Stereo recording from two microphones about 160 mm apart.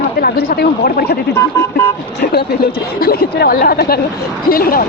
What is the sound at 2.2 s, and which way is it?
Speech, 80° left.